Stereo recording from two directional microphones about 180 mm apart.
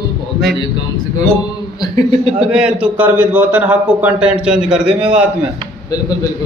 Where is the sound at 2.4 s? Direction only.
5° right (ahead or behind).